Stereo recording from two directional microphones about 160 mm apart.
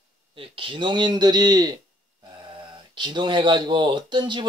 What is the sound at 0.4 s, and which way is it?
Speech, 35° right (ahead or behind).